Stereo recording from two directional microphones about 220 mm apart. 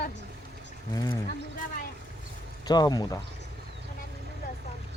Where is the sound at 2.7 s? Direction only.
20° left (ahead or behind).